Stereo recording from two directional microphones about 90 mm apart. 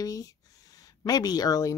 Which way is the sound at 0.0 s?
40° left (ahead or behind).